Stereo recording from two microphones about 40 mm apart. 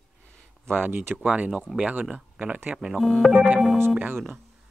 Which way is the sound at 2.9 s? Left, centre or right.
Centre.